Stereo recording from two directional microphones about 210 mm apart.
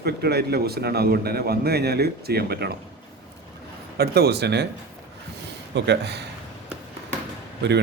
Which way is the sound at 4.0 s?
50° right (ahead or behind).